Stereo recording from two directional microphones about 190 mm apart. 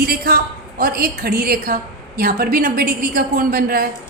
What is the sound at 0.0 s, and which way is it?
A woman's voice, 50° right (ahead or behind).